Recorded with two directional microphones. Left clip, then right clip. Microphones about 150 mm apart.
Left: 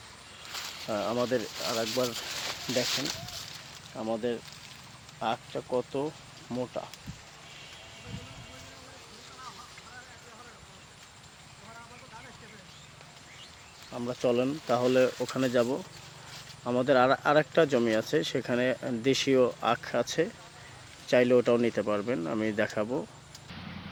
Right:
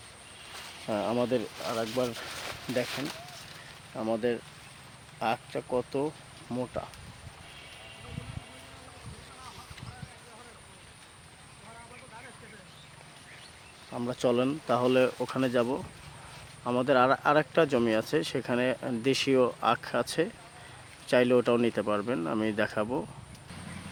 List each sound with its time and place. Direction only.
0.9 s speech: 35° right (ahead or behind)
1.6 s speech: 5° right (ahead or behind)
2.8 s speech: 90° left
3.9 s speech: 30° right (ahead or behind); by 6.8 s 15° right (ahead or behind)
13.9 s speech: 20° right (ahead or behind)
14.7 s speech: 5° right (ahead or behind)